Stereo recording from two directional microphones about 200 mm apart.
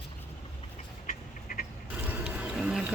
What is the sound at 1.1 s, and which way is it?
Duck, 45° left (ahead or behind).